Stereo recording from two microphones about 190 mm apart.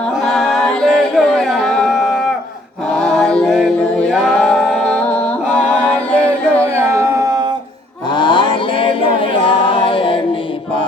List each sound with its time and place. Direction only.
0.3 s singing: 5° left (ahead or behind)
2.9 s music: 5° left (ahead or behind)
6.6 s music: 15° right (ahead or behind)
8.1 s a sound: 25° left (ahead or behind)